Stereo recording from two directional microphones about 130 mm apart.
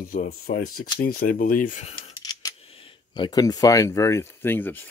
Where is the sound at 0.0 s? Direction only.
90° left.